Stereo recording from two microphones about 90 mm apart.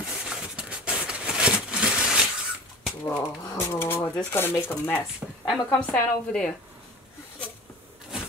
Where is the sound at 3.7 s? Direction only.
25° left (ahead or behind).